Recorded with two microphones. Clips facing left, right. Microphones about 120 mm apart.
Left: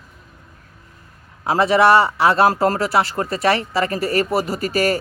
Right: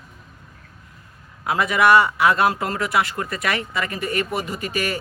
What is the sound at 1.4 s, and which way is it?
A man's voice, 30° left (ahead or behind).